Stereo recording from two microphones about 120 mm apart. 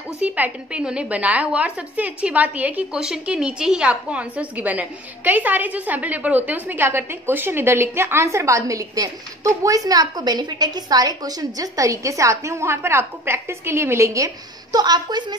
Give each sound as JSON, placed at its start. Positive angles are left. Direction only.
{"t": 0.2, "sound": "a woman's voice", "side_deg": -10}